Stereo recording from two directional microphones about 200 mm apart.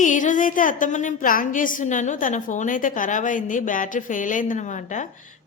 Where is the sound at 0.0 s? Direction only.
40° left (ahead or behind).